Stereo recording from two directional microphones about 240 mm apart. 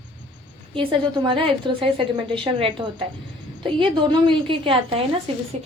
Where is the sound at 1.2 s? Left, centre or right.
Right.